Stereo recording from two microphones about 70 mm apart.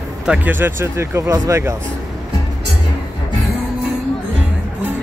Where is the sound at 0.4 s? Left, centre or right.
Right.